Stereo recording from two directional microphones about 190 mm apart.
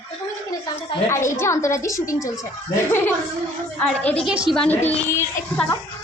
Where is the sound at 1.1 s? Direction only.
15° left (ahead or behind).